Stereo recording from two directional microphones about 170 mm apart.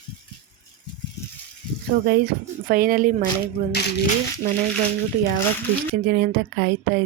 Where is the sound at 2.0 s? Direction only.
70° right (ahead or behind).